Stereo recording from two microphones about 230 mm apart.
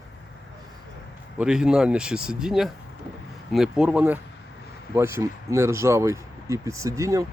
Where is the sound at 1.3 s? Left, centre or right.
Centre.